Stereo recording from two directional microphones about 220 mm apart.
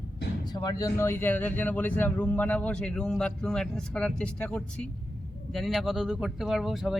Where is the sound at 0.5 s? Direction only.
15° left (ahead or behind).